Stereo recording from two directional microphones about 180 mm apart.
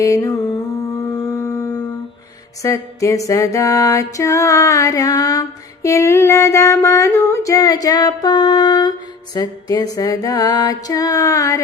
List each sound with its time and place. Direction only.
0.0 s music: 20° left (ahead or behind)
1.1 s a sound: 15° left (ahead or behind)
2.6 s music: 15° left (ahead or behind)